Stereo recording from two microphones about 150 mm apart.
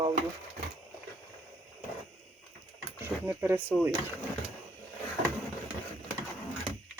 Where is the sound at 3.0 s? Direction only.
15° right (ahead or behind).